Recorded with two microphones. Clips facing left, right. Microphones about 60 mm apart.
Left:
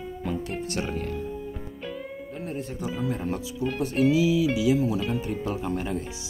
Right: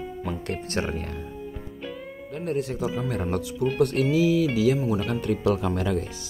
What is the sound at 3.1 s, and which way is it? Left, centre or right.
Speech, right.